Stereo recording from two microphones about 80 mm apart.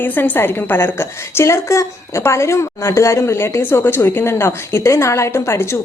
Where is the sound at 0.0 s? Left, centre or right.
Left.